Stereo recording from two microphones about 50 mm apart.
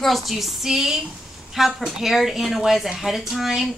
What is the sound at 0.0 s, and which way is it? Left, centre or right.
A woman's voice, centre.